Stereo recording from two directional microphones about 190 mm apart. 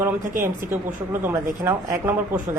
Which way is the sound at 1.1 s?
10° right (ahead or behind).